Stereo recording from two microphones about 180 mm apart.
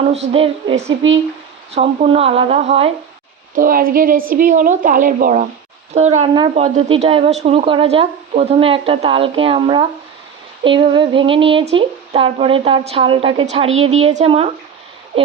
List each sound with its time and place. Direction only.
0.1 s a woman's voice: 35° right (ahead or behind)
3.5 s speech: 50° right (ahead or behind)
5.9 s a woman's voice: 40° right (ahead or behind)